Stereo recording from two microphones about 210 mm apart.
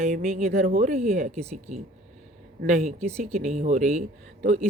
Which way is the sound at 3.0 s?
30° right (ahead or behind).